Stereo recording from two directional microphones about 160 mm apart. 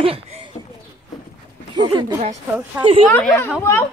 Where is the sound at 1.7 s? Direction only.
25° right (ahead or behind).